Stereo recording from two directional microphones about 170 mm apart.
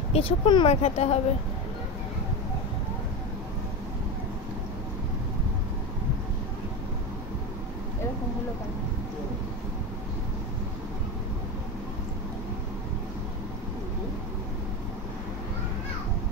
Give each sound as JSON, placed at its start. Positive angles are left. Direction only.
{"t": 0.1, "sound": "speech", "side_deg": 30}